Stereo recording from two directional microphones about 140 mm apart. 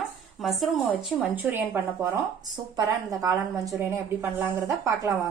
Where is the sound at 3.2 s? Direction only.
25° right (ahead or behind).